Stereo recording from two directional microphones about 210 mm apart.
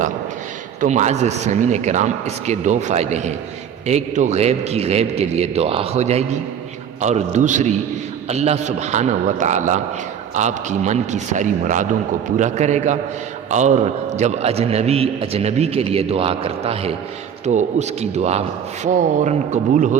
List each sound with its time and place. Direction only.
0.8 s a man's voice: 35° right (ahead or behind)